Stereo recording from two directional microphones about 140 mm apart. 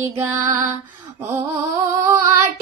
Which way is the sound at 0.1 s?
20° right (ahead or behind).